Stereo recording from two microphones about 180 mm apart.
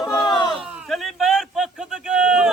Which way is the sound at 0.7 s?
5° right (ahead or behind).